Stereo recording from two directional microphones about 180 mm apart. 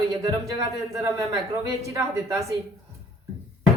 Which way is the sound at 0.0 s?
20° right (ahead or behind).